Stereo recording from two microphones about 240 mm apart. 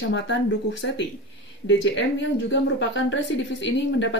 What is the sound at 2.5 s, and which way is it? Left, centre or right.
Speech, left.